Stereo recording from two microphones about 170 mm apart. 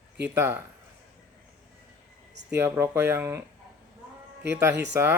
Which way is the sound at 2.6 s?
15° right (ahead or behind).